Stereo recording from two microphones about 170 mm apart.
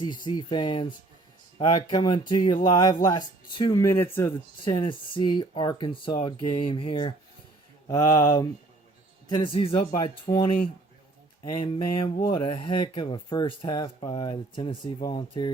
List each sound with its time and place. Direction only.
0.3 s speech: 25° left (ahead or behind)
4.6 s speech: 30° left (ahead or behind)
7.9 s speech: 20° left (ahead or behind)
9.3 s speech: 30° left (ahead or behind)
11.9 s a sound: 30° left (ahead or behind)
12.3 s speech: 30° left (ahead or behind)